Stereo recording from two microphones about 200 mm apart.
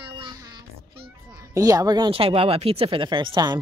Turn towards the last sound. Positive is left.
turn(degrees=-20)  # may be behind; listen again after turning